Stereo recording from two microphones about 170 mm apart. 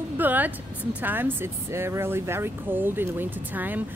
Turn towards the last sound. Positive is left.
turn(degrees=-10)  # may be behind; listen again after turning